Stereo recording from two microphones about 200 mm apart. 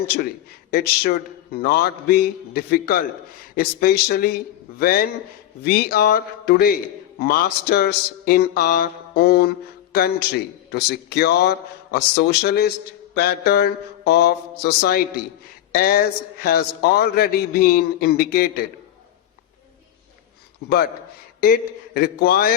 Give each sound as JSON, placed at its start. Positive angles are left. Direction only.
{"t": 0.7, "sound": "a man's voice", "side_deg": 50}
{"t": 20.7, "sound": "a man's voice", "side_deg": 50}